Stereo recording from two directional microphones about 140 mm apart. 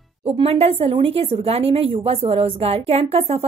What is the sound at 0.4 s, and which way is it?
A woman's voice, 45° right (ahead or behind).